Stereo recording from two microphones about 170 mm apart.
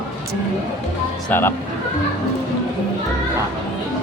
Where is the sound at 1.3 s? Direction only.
15° left (ahead or behind).